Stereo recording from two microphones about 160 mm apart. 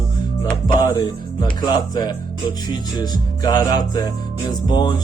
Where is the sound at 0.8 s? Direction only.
25° left (ahead or behind).